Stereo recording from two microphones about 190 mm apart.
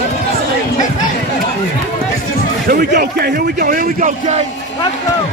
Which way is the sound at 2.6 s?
50° right (ahead or behind).